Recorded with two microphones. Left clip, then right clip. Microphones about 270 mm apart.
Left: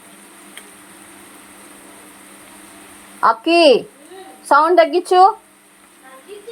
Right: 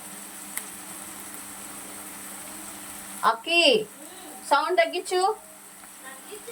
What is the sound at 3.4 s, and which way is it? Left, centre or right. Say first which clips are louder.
Speech: left 10 dB; left.